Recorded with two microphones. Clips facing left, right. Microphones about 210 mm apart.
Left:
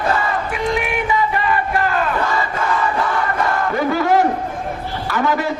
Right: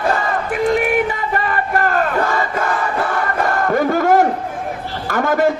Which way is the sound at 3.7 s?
50° right (ahead or behind).